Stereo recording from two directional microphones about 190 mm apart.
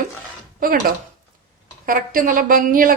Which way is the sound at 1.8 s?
50° right (ahead or behind).